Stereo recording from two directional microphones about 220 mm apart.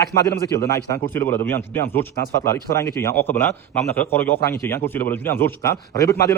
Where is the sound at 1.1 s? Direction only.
10° left (ahead or behind).